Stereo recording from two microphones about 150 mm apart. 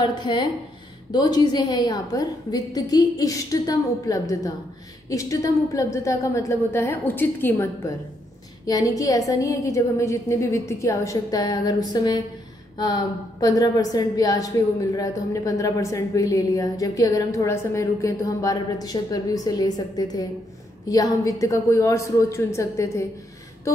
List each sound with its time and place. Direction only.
0.0 s a woman's voice: 30° left (ahead or behind)